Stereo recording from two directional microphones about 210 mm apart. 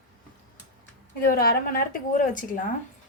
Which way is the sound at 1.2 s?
45° left (ahead or behind).